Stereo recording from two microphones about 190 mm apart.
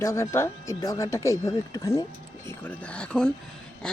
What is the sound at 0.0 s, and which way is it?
Speech, 15° left (ahead or behind).